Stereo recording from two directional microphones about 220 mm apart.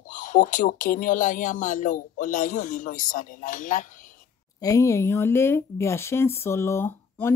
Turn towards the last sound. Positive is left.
turn(degrees=10)  # may be behind; listen again after turning